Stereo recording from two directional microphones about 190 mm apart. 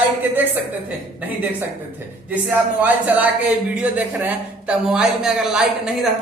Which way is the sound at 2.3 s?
10° right (ahead or behind).